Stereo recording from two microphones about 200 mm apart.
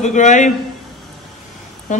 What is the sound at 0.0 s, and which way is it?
Speech, 35° left (ahead or behind).